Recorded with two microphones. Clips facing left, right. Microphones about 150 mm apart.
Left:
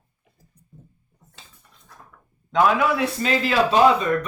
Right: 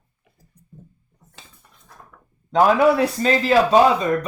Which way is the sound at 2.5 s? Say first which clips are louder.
Right 4 dB; 35° right (ahead or behind).